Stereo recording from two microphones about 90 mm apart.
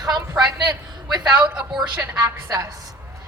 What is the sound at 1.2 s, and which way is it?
A woman's voice, 10° right (ahead or behind).